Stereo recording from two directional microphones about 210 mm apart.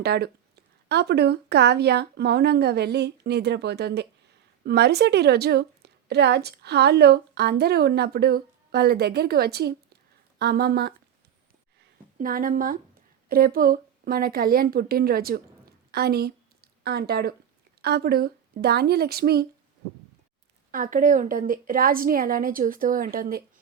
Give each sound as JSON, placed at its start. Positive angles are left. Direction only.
{"t": 0.0, "sound": "a woman's voice", "side_deg": -50}
{"t": 12.1, "sound": "speech", "side_deg": -40}
{"t": 20.7, "sound": "a woman's voice", "side_deg": -40}